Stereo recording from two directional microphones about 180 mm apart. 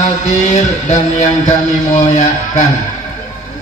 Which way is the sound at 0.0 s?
40° left (ahead or behind).